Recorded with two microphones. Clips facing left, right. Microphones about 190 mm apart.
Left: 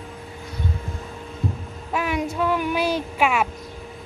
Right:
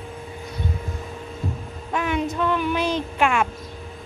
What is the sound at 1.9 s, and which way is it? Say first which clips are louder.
Speech: even; 5° left (ahead or behind).